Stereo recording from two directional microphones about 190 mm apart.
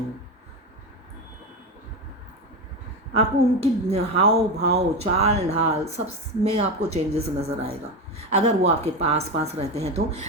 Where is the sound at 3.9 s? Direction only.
35° right (ahead or behind).